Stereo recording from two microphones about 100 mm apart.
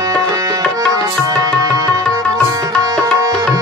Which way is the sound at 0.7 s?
35° right (ahead or behind).